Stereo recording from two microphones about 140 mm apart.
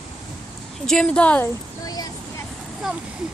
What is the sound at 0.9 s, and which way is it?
Speech, 5° left (ahead or behind).